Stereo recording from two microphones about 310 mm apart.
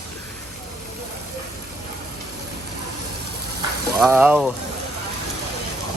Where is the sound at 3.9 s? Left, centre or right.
Centre.